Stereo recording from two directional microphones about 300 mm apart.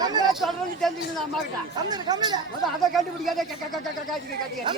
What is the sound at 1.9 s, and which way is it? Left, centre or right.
Speech, centre.